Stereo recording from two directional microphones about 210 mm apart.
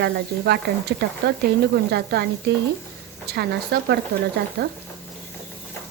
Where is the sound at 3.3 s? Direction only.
50° right (ahead or behind).